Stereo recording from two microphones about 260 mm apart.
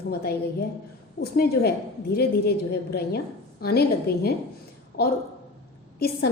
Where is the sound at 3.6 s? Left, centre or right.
Left.